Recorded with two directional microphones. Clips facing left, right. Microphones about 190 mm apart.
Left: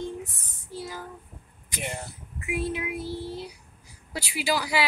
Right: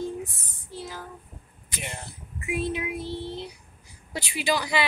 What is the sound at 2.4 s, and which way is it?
Child singing, 5° left (ahead or behind).